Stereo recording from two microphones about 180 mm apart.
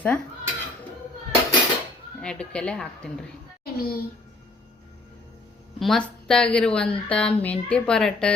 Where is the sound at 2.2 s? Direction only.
5° left (ahead or behind).